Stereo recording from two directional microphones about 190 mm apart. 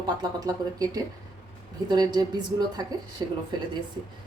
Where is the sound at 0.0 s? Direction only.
20° right (ahead or behind).